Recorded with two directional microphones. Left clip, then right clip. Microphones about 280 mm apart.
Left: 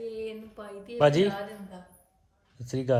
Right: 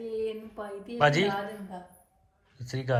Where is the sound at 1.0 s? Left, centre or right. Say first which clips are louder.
Left 2 dB; left.